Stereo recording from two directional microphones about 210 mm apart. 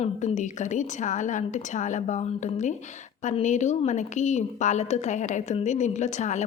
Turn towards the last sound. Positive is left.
turn(degrees=35)  # may be behind; listen again after turning